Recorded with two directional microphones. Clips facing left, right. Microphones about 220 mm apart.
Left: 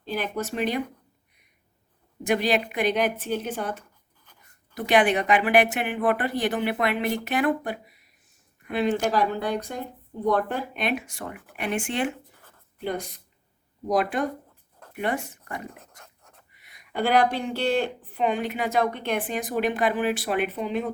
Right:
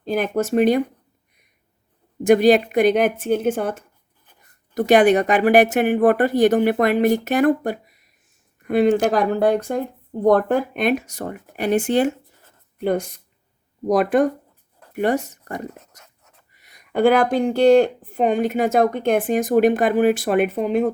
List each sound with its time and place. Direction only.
0.1 s a woman's voice: 50° right (ahead or behind)
2.2 s a woman's voice: 45° right (ahead or behind)